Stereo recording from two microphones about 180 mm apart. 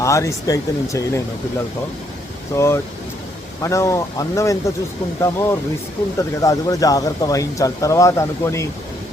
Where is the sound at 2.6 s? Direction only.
15° left (ahead or behind).